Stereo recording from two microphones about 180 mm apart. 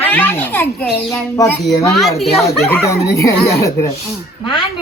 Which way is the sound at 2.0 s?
Centre (ahead or behind).